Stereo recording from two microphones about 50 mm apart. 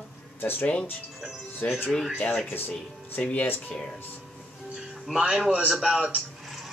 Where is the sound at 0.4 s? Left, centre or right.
Left.